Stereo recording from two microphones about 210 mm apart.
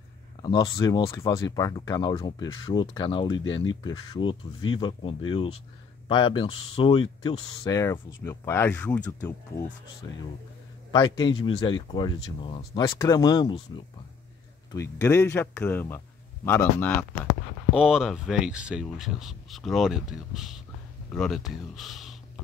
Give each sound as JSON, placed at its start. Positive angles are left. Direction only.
{"t": 0.4, "sound": "speech", "side_deg": 20}
{"t": 10.9, "sound": "speech", "side_deg": 20}
{"t": 14.7, "sound": "speech", "side_deg": 15}
{"t": 17.7, "sound": "speech", "side_deg": -5}